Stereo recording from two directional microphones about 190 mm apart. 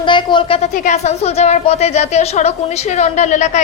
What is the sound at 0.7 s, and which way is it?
A woman's voice, 40° left (ahead or behind).